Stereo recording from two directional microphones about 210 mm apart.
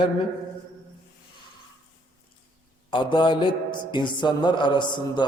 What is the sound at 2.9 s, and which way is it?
Mantra, 20° left (ahead or behind).